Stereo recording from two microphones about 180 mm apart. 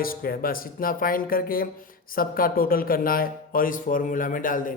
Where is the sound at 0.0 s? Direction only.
55° left (ahead or behind).